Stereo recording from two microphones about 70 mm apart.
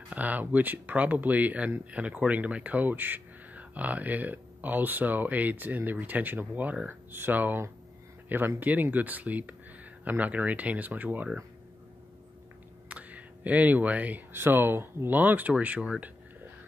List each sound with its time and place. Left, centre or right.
0.1 s speech: right
12.8 s a sound: centre
14.3 s speech: right